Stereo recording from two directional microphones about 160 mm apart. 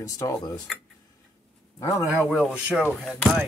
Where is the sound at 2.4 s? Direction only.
10° right (ahead or behind).